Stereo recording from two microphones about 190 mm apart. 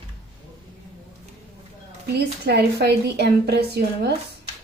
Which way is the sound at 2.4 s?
55° right (ahead or behind).